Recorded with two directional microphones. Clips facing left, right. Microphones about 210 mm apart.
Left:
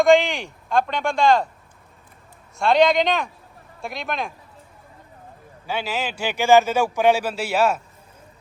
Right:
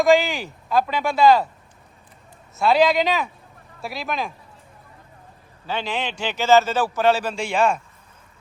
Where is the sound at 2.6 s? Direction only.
5° right (ahead or behind).